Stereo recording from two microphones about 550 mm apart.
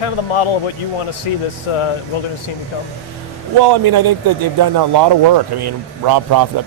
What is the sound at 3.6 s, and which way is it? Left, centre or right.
Speech, right.